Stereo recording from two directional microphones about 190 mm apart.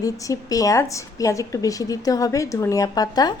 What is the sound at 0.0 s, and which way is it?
A woman's voice, 20° left (ahead or behind).